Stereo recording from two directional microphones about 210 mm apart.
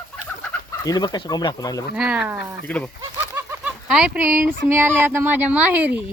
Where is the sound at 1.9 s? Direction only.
5° right (ahead or behind).